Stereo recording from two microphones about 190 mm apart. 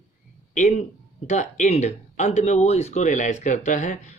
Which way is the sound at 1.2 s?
40° left (ahead or behind).